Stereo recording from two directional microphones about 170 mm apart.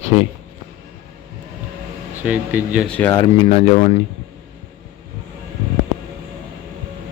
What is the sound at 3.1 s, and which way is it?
Speech, 25° left (ahead or behind).